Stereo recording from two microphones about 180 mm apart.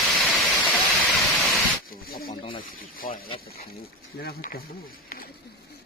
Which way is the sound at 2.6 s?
50° left (ahead or behind).